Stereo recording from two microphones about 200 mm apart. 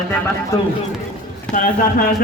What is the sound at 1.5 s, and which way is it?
Speech, 40° left (ahead or behind).